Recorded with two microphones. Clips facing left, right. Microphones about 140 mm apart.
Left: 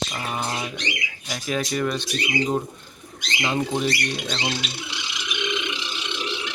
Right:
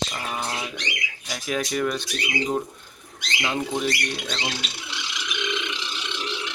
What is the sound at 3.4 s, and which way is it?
Speech, 5° left (ahead or behind).